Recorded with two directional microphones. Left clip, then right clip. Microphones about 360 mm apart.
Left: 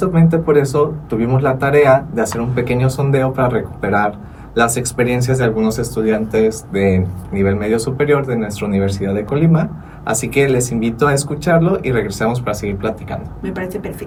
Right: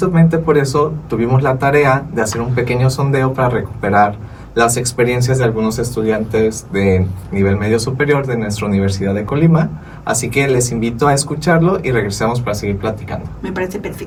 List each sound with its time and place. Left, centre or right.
0.0 s speech: centre